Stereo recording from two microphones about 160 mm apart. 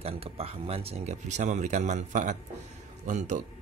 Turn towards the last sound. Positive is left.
turn(degrees=-50)  # may be behind; listen again after turning